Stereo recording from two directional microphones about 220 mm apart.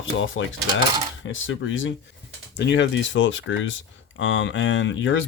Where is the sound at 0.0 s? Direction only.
60° left (ahead or behind).